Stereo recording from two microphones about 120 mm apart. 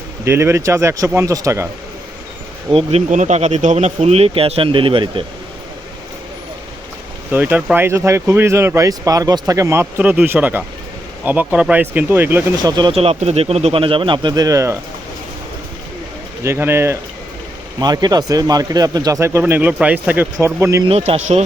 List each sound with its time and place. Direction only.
0.3 s speech: 20° right (ahead or behind)
2.7 s speech: 75° right (ahead or behind); by 5.2 s 50° right (ahead or behind)
7.3 s speech: 15° right (ahead or behind)
10.0 s speech: 15° right (ahead or behind)
12.6 s speech: 35° right (ahead or behind)
12.9 s speech: 55° right (ahead or behind); by 14.8 s 25° right (ahead or behind)
16.4 s speech: 20° right (ahead or behind)
17.7 s speech: 35° right (ahead or behind)
20.8 s speech: 55° right (ahead or behind)